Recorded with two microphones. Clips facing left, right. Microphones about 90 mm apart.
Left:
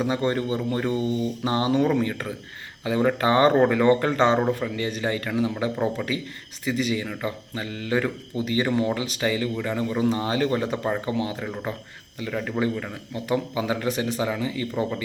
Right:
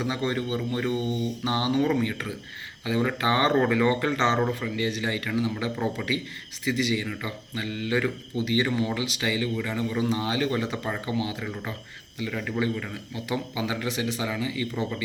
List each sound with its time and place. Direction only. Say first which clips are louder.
0.0 s speech: left 4 dB; 40° left (ahead or behind)
4.4 s a man's voice: left 3 dB; 20° left (ahead or behind)
4.8 s speech: left 2 dB; 40° left (ahead or behind)
5.7 s a man's voice: left 3 dB; 25° left (ahead or behind)
6.7 s speech: left 1 dB; 40° left (ahead or behind)
12.2 s speech: left 2 dB; 30° left (ahead or behind)